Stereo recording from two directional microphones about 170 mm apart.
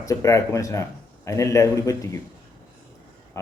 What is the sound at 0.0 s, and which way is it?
A man's voice, 20° left (ahead or behind).